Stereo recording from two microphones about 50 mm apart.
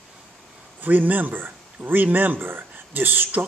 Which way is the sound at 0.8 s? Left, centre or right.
Right.